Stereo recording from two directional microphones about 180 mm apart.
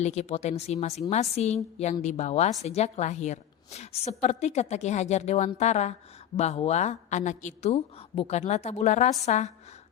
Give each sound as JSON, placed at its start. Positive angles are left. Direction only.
{"t": 0.0, "sound": "a woman's voice", "side_deg": 35}